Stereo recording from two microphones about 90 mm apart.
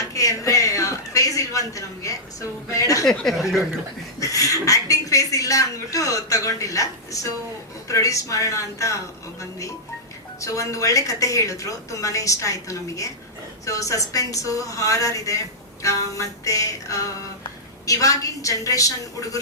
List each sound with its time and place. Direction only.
0.0 s a sound: 35° left (ahead or behind)
3.1 s speech: centre (ahead or behind)
4.2 s speech: 40° left (ahead or behind)